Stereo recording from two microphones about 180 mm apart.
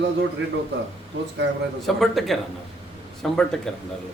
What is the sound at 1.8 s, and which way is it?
Speech, centre (ahead or behind).